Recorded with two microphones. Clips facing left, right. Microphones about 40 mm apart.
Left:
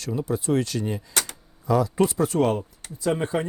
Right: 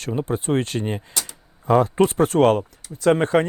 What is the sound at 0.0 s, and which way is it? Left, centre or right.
Speech, right.